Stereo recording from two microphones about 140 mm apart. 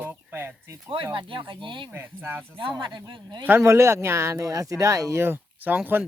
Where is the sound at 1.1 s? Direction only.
35° right (ahead or behind).